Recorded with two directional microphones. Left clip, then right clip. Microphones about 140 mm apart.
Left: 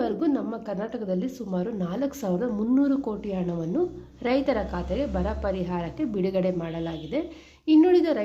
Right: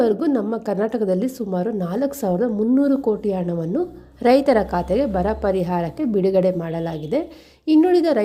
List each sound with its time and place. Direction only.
0.0 s a woman's voice: 45° right (ahead or behind)
1.5 s speech: 40° right (ahead or behind)
4.3 s a woman's voice: 55° right (ahead or behind)